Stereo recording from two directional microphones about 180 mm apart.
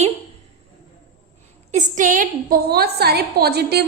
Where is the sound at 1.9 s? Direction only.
45° right (ahead or behind); by 3.8 s 65° right (ahead or behind).